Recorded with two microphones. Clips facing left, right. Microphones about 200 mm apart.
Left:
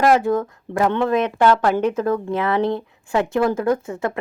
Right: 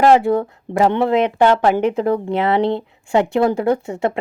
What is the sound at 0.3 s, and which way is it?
A woman's voice, 25° right (ahead or behind).